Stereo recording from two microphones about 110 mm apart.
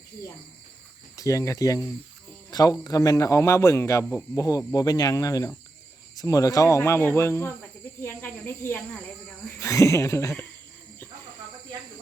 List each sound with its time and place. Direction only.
1.1 s a man's voice: 30° left (ahead or behind)